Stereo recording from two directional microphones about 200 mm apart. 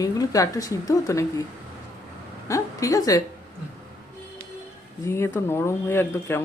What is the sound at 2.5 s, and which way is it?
Speech, 15° left (ahead or behind).